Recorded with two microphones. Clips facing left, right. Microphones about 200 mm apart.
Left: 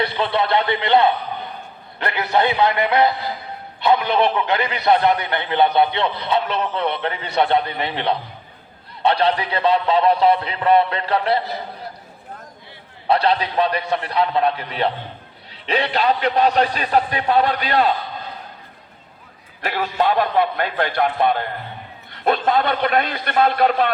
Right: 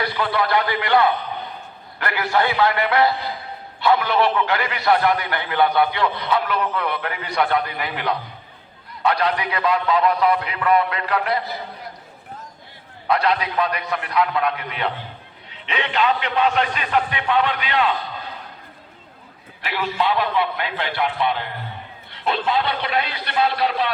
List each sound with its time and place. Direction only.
0.0 s a man's voice: 25° left (ahead or behind)
13.1 s a man's voice: 30° left (ahead or behind)
19.6 s a man's voice: 45° left (ahead or behind)